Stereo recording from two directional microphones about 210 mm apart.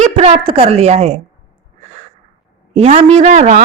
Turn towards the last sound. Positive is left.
turn(degrees=-35)  # may be behind; listen again after turning